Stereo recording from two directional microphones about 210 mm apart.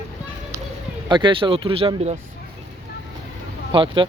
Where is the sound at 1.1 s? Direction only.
20° right (ahead or behind).